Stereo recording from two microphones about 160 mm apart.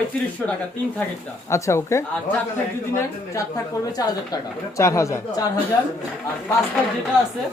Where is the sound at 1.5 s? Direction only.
20° left (ahead or behind).